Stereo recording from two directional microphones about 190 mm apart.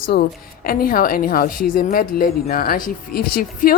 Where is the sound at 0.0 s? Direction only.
50° left (ahead or behind).